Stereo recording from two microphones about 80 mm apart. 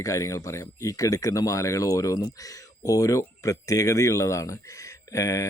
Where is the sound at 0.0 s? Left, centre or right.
Left.